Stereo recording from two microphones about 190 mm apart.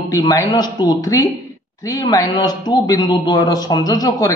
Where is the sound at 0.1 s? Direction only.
20° left (ahead or behind).